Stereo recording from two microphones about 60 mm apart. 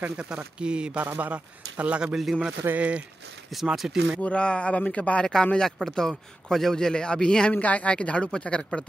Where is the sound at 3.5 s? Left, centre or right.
Centre.